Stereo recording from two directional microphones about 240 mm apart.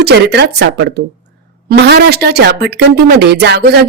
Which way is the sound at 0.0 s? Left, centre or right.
Right.